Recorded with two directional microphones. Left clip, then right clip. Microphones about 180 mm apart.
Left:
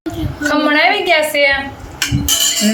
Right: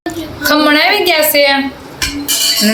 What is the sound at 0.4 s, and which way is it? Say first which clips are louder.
A woman's voice: right 3 dB; 15° right (ahead or behind).